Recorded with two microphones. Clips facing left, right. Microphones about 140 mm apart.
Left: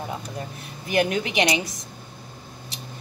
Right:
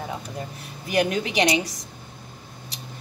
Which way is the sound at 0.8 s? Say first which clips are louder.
Even; 35° right (ahead or behind).